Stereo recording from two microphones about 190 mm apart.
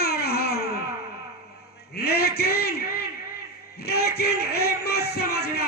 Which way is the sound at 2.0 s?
55° left (ahead or behind).